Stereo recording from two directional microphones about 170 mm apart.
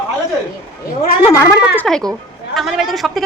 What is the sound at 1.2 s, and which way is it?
Speech, 20° left (ahead or behind).